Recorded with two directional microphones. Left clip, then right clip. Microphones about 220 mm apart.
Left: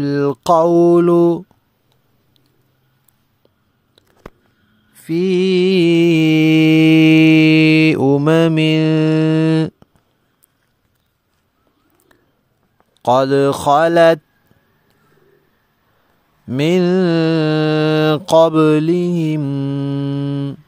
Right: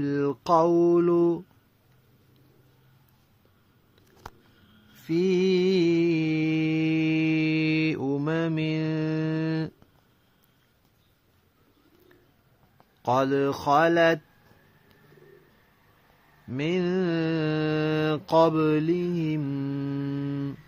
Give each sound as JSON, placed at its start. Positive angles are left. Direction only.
{"t": 0.0, "sound": "mantra", "side_deg": 50}
{"t": 4.9, "sound": "music", "side_deg": 30}
{"t": 13.0, "sound": "mantra", "side_deg": 50}
{"t": 16.4, "sound": "mantra", "side_deg": 55}